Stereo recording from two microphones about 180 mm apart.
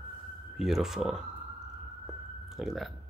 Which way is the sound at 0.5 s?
Centre (ahead or behind).